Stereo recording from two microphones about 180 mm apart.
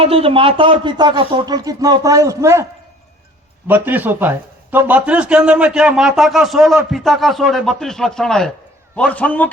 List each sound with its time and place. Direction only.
0.0 s speech: 30° right (ahead or behind); by 2.6 s 15° right (ahead or behind)
3.7 s a man's voice: 10° right (ahead or behind); by 9.5 s 10° left (ahead or behind)